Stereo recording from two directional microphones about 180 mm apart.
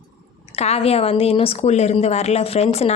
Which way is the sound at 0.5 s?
35° left (ahead or behind).